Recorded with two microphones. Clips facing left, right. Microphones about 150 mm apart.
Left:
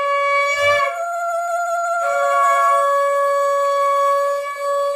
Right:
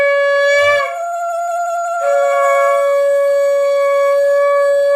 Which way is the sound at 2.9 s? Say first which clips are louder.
Right 6 dB; 70° right (ahead or behind).